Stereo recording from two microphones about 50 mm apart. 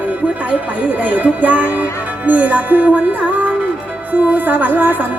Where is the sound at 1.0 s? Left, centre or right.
Right.